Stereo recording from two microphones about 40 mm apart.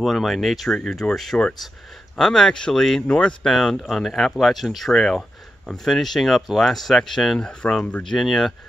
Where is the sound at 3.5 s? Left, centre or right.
Centre.